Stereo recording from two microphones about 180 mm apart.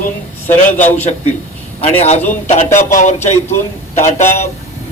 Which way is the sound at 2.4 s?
45° left (ahead or behind).